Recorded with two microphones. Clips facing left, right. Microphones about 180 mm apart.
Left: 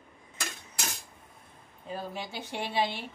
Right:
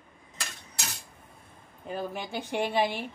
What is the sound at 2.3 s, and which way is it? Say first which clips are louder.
Speech: right 6 dB; 50° right (ahead or behind).